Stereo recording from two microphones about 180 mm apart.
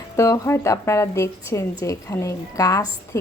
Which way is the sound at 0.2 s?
15° left (ahead or behind).